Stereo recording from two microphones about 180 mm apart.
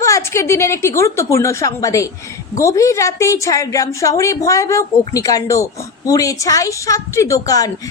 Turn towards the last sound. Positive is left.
turn(degrees=20)  # may be behind; listen again after turning